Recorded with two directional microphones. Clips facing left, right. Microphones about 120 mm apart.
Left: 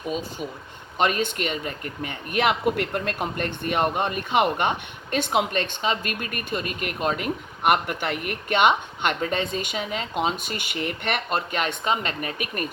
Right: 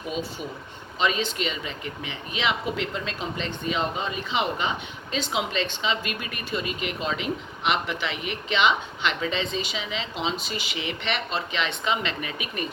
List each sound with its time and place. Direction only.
0.1 s speech: 45° left (ahead or behind)